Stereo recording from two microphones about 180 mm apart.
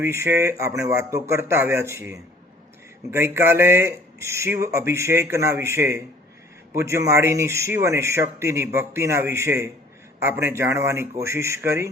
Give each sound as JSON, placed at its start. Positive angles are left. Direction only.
{"t": 0.0, "sound": "speech", "side_deg": -15}